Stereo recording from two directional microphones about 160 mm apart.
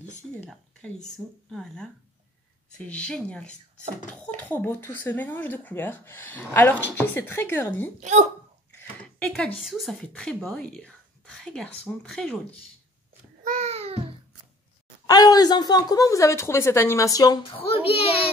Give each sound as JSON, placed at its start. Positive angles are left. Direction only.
{"t": 0.4, "sound": "speech", "side_deg": 5}
{"t": 2.9, "sound": "speech", "side_deg": 5}
{"t": 8.0, "sound": "speech", "side_deg": -50}
{"t": 9.0, "sound": "a woman's voice", "side_deg": 5}
{"t": 13.4, "sound": "babbling", "side_deg": -50}
{"t": 15.0, "sound": "speech", "side_deg": 25}